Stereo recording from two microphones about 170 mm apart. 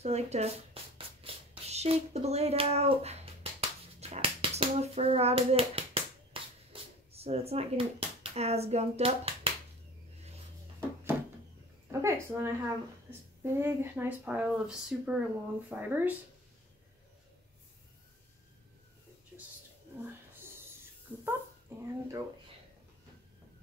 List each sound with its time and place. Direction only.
0.0 s speech: 40° right (ahead or behind)
4.0 s hands: 35° right (ahead or behind)
11.9 s a woman's voice: 15° right (ahead or behind)
19.3 s a sound: 5° right (ahead or behind)
21.3 s dog: 15° right (ahead or behind)